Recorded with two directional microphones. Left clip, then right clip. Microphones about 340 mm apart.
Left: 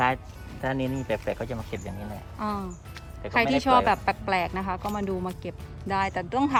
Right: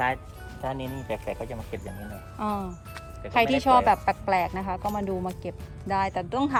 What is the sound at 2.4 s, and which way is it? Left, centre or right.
A woman's voice, centre.